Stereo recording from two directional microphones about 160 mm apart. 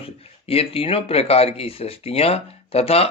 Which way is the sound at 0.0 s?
35° left (ahead or behind).